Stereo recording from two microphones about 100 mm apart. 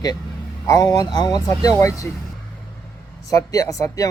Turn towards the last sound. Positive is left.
turn(degrees=35)  # may be behind; listen again after turning